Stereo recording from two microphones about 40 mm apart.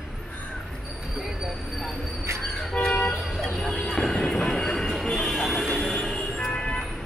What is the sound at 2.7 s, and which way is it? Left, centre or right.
Speech, left.